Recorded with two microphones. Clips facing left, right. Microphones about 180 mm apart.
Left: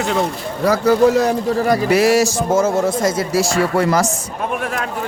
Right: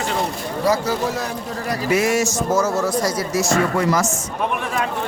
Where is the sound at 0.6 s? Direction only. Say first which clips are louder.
Left 5 dB; 60° left (ahead or behind).